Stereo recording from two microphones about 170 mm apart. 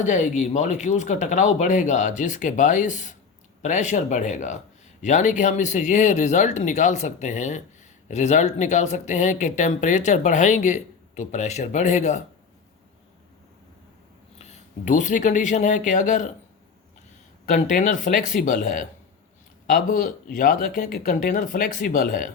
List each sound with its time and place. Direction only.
0.0 s speech: 45° left (ahead or behind)
14.3 s speech: 40° left (ahead or behind)
17.4 s speech: 50° left (ahead or behind)